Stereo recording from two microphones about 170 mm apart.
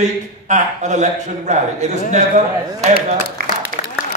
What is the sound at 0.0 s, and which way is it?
A man's voice, 45° right (ahead or behind).